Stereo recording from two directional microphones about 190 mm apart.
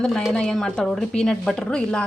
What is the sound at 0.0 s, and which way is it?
A woman's voice, centre (ahead or behind).